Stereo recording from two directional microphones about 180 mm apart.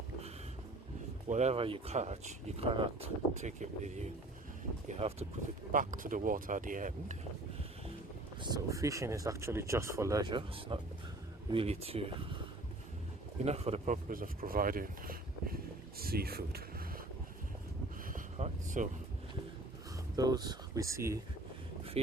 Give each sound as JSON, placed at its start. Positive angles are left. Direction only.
{"t": 1.3, "sound": "speech", "side_deg": -40}
{"t": 5.7, "sound": "speech", "side_deg": -45}
{"t": 8.4, "sound": "speech", "side_deg": -20}
{"t": 13.4, "sound": "speech", "side_deg": -35}
{"t": 18.1, "sound": "vehicle", "side_deg": -40}
{"t": 20.1, "sound": "speech", "side_deg": -20}
{"t": 22.0, "sound": "speech", "side_deg": -35}